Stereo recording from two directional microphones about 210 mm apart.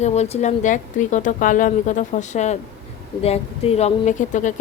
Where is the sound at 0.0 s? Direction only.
30° left (ahead or behind).